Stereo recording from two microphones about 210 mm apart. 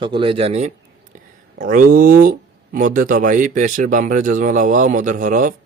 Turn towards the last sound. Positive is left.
turn(degrees=-40)  # may be behind; listen again after turning